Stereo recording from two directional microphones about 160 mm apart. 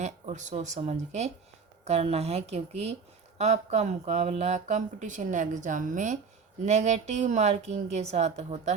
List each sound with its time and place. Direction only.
0.0 s speech: 45° right (ahead or behind)